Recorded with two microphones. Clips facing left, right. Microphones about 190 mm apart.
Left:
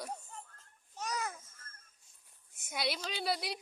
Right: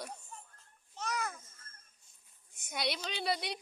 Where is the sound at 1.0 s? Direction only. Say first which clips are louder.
Right 1 dB; 15° left (ahead or behind).